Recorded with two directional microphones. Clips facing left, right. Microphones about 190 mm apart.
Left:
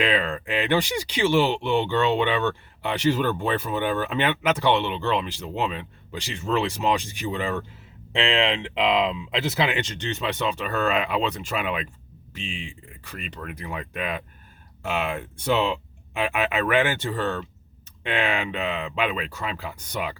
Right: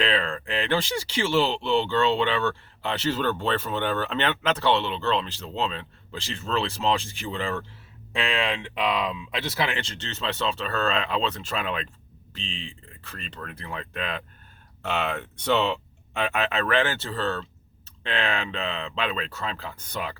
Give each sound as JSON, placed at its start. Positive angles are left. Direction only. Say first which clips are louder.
{"t": 0.0, "sound": "speech", "louder": "left 2 dB", "side_deg": 15}